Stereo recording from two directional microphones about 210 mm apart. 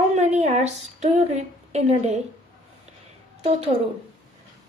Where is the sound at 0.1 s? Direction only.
35° right (ahead or behind).